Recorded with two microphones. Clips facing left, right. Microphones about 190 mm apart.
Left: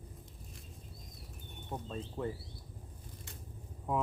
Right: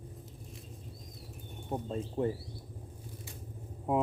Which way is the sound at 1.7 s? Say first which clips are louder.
Right 6 dB; 30° right (ahead or behind).